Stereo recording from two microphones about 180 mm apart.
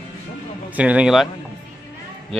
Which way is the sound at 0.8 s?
5° right (ahead or behind).